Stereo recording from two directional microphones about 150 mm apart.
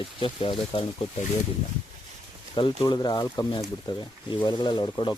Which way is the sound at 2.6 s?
30° left (ahead or behind).